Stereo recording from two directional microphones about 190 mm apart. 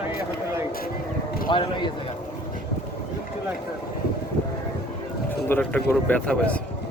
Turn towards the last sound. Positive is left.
turn(degrees=5)  # may be behind; listen again after turning